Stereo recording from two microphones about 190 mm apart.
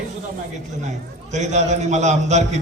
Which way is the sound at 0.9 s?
40° right (ahead or behind).